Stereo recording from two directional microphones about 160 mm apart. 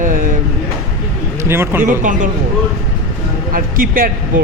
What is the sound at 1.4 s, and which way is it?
Speech, 15° right (ahead or behind).